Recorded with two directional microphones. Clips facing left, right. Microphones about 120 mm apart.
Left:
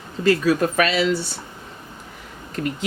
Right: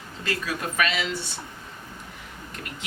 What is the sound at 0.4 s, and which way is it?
Speech, 35° left (ahead or behind).